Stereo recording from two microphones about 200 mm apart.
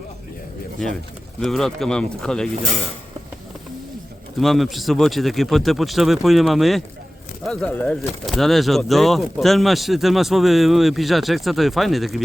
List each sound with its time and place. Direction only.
1.4 s speech: centre (ahead or behind)
4.4 s speech: centre (ahead or behind)